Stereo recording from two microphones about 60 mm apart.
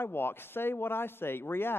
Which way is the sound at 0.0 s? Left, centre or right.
Left.